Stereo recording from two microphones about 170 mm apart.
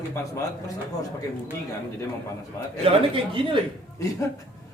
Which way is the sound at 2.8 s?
30° right (ahead or behind).